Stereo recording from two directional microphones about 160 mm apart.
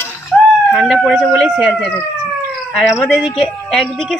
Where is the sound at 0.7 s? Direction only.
Centre (ahead or behind).